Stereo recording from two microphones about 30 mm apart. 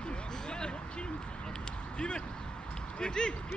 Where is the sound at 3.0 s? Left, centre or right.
Left.